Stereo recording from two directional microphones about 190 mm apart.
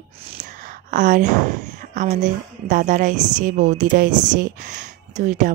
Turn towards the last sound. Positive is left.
turn(degrees=-40)  # may be behind; listen again after turning